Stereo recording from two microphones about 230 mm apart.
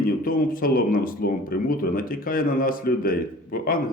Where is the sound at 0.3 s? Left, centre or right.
Left.